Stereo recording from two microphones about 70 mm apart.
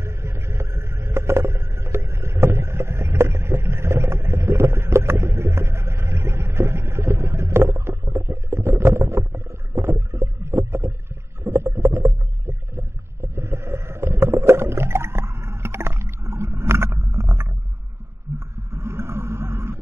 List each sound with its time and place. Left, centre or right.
0.0 s vehicle: right
2.4 s boat: right
11.4 s stomach rumble: right
18.3 s a sound: right